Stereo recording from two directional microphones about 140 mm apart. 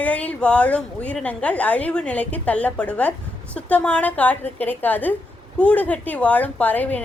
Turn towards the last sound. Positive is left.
turn(degrees=10)  # may be behind; listen again after turning